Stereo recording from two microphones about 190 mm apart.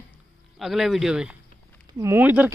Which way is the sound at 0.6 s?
Centre (ahead or behind).